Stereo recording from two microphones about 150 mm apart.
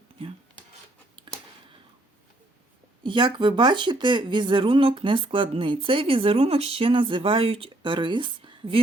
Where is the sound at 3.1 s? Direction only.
30° right (ahead or behind).